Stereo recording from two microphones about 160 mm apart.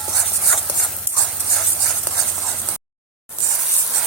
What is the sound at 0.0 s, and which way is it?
Dog, centre (ahead or behind).